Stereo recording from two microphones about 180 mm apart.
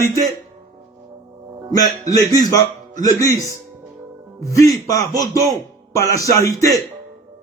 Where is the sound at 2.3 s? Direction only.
20° left (ahead or behind).